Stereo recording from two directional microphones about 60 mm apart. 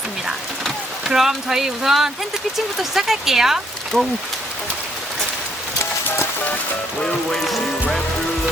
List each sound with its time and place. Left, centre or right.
1.0 s speech: centre
3.9 s speech: centre
5.8 s music: left
7.0 s music: centre